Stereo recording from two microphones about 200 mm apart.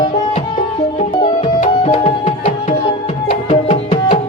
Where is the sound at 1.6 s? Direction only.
30° left (ahead or behind).